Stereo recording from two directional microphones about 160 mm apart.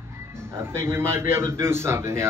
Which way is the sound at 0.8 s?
15° right (ahead or behind).